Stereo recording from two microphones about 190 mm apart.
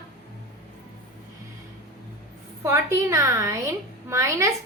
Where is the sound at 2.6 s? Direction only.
15° right (ahead or behind).